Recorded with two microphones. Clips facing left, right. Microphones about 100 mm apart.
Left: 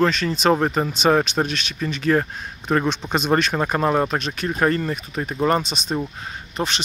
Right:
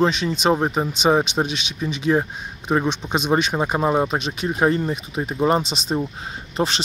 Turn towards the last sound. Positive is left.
turn(degrees=-30)  # may be behind; listen again after turning